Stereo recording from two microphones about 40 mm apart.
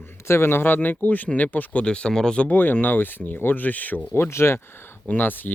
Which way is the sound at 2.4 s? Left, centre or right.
Left.